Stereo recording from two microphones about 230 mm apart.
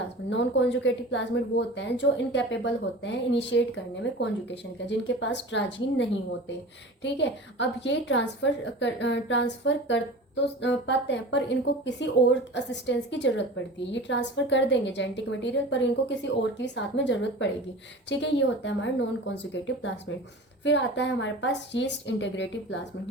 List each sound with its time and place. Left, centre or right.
0.3 s speech: left
20.7 s speech: left